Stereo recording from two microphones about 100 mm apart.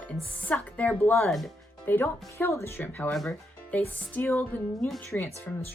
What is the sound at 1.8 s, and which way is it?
A woman's voice, 20° left (ahead or behind).